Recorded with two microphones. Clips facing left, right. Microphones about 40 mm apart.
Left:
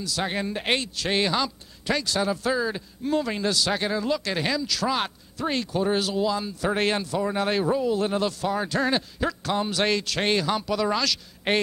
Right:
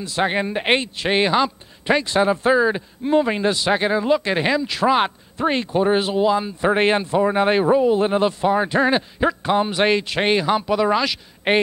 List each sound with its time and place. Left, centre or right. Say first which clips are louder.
0.0 s a man's voice: right 7 dB; right